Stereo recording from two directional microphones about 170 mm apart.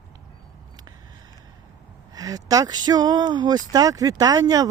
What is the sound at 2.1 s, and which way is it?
Speech, 20° right (ahead or behind).